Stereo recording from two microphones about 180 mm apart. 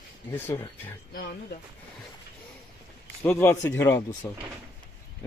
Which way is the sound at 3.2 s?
15° left (ahead or behind).